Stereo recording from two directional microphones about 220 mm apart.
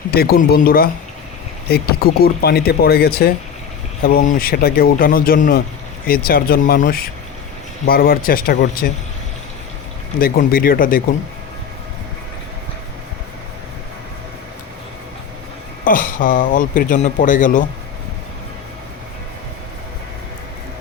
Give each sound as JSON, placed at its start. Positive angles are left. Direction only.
{"t": 0.1, "sound": "speech", "side_deg": 45}
{"t": 10.2, "sound": "speech", "side_deg": 40}
{"t": 15.8, "sound": "speech", "side_deg": 40}